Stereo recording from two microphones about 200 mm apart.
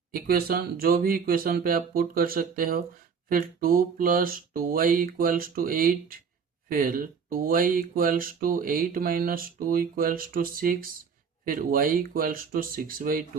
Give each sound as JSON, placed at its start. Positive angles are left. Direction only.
{"t": 0.1, "sound": "speech", "side_deg": -50}